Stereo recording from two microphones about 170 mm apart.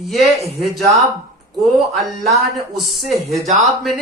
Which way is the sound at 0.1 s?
Centre (ahead or behind).